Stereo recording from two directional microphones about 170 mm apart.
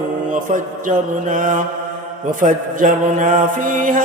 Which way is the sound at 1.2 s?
50° right (ahead or behind).